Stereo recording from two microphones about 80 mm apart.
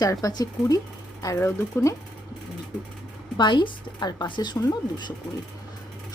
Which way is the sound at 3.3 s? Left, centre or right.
Left.